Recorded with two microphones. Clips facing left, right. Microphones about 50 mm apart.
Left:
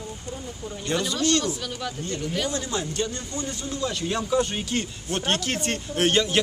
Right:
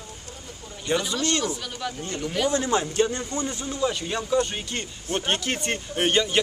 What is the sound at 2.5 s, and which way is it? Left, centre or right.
Speech, right.